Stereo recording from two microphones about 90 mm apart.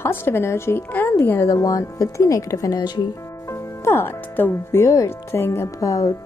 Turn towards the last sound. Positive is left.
turn(degrees=40)  # may be behind; listen again after turning